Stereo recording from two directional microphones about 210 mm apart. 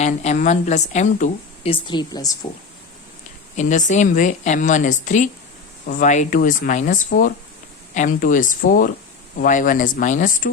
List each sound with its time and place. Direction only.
0.0 s speech: 30° left (ahead or behind)
1.9 s speech: 20° left (ahead or behind)
3.5 s speech: 35° left (ahead or behind)